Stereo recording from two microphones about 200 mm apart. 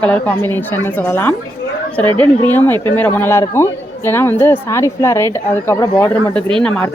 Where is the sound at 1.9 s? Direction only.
5° left (ahead or behind).